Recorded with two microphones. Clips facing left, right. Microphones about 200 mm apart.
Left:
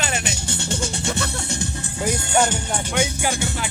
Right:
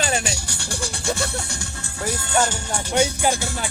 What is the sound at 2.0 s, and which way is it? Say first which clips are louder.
Speech: left 2 dB; 20° left (ahead or behind).